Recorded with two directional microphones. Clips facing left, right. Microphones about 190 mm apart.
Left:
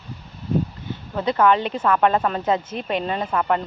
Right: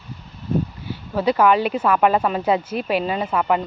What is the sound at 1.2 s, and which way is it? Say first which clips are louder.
Speech: right 2 dB; 10° right (ahead or behind).